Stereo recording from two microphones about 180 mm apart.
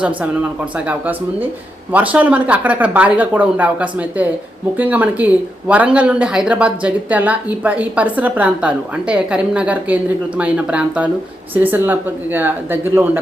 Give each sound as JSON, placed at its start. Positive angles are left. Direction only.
{"t": 0.9, "sound": "speech", "side_deg": -10}